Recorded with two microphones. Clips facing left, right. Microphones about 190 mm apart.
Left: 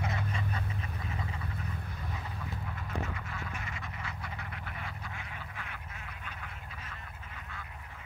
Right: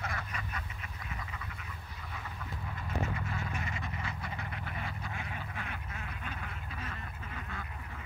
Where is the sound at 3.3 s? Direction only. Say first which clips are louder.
Right 3 dB; 30° right (ahead or behind).